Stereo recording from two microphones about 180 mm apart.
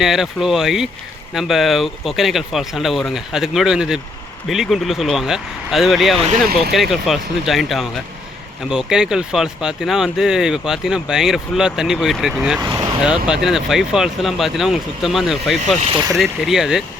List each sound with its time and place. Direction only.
0.0 s speech: centre (ahead or behind)
6.1 s speech: 40° right (ahead or behind)
6.5 s speech: 60° right (ahead or behind)
6.7 s speech: centre (ahead or behind)
12.6 s speech: 20° right (ahead or behind)
13.0 s speech: 5° right (ahead or behind)